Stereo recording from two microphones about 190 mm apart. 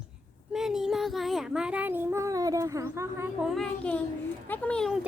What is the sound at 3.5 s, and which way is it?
A woman's voice, 5° left (ahead or behind).